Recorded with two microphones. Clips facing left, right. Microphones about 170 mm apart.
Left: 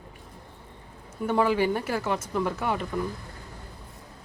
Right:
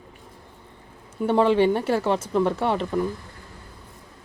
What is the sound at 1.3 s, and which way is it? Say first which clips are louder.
Speech: right 5 dB; 25° right (ahead or behind).